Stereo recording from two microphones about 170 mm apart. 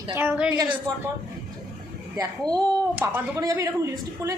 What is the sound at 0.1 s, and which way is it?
Speech, 10° right (ahead or behind).